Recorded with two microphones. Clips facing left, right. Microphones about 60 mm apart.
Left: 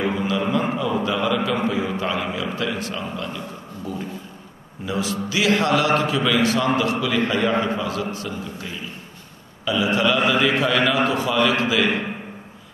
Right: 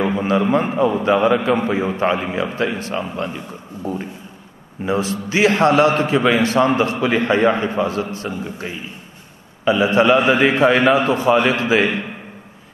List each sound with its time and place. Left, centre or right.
0.0 s a man's voice: right